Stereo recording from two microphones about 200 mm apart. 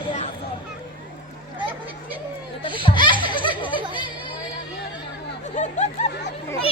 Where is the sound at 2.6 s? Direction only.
25° left (ahead or behind).